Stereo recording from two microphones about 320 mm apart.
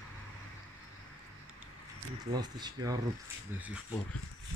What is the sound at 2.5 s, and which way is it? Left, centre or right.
Speech, centre.